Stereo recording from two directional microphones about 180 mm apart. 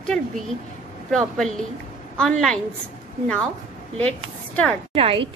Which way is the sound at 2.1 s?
5° left (ahead or behind).